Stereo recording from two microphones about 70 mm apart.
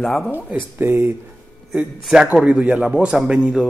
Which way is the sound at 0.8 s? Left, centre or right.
Right.